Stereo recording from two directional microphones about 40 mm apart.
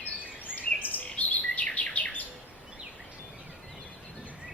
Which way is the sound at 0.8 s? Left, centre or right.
Left.